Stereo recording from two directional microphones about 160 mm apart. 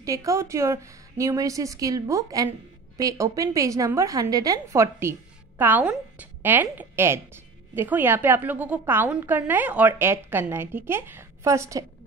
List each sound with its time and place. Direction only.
0.0 s a woman's voice: 20° right (ahead or behind)